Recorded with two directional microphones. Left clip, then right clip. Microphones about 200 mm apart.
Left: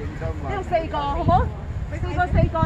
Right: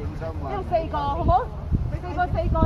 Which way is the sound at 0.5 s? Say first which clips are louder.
Left 1 dB; 15° left (ahead or behind).